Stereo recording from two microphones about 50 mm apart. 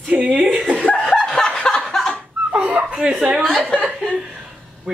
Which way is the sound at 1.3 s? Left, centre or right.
Centre.